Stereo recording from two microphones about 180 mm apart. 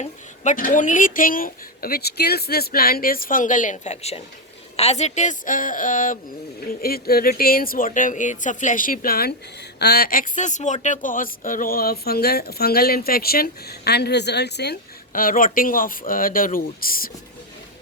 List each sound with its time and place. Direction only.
0.0 s speech: 45° left (ahead or behind)